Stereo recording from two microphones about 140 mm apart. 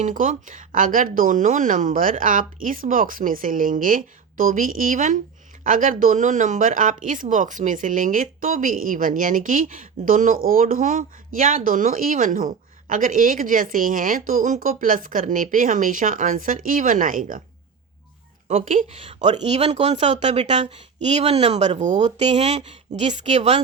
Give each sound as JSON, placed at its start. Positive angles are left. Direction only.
{"t": 0.0, "sound": "speech", "side_deg": -65}
{"t": 18.4, "sound": "a woman's voice", "side_deg": -60}